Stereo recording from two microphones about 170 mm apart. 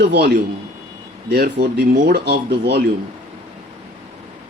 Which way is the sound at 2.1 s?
75° right (ahead or behind).